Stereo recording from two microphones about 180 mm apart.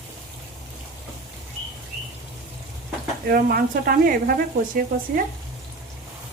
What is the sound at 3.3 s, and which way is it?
Speech, 55° right (ahead or behind).